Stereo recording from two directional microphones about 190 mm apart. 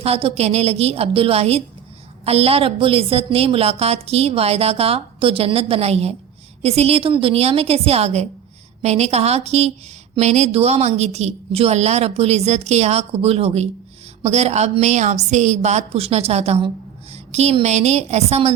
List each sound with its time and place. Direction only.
0.0 s a woman's voice: 30° right (ahead or behind)